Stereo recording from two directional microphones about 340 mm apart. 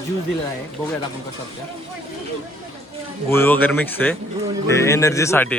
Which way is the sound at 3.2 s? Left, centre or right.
Centre.